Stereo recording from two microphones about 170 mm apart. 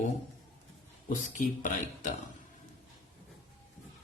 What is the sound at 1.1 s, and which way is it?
Speech, 50° left (ahead or behind).